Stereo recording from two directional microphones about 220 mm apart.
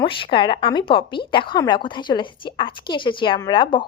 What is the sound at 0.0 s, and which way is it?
A woman's voice, 25° left (ahead or behind).